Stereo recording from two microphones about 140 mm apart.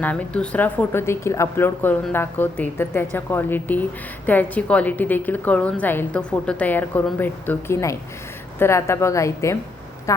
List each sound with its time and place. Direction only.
0.0 s a woman's voice: 10° left (ahead or behind)